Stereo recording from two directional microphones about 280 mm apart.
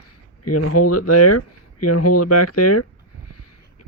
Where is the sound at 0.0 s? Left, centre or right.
Left.